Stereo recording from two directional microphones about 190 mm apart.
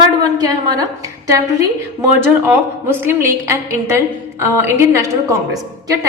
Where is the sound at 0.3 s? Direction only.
20° right (ahead or behind).